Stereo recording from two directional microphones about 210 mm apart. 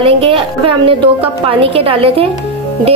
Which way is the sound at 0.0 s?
25° right (ahead or behind).